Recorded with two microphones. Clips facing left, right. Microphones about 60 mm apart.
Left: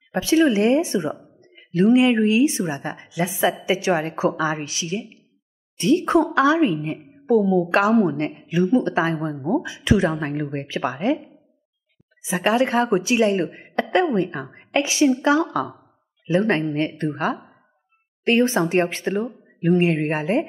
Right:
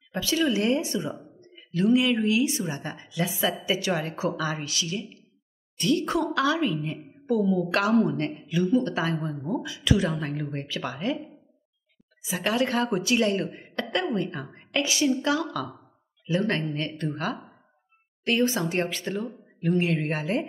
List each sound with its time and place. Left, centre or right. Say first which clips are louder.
0.1 s speech: left 7 dB; left
12.3 s a woman's voice: left 6 dB; left